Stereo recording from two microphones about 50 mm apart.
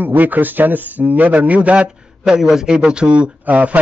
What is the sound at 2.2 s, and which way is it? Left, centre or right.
A man's voice, centre.